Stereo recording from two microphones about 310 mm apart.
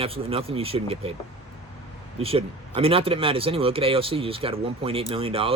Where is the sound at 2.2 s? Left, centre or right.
Centre.